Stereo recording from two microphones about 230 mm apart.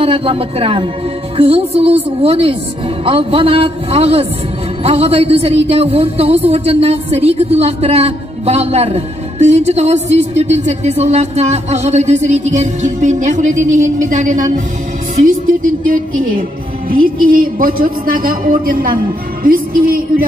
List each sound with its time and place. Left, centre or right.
0.0 s a woman's voice: right